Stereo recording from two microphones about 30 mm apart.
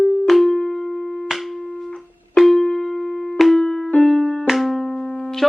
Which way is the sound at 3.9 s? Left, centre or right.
Centre.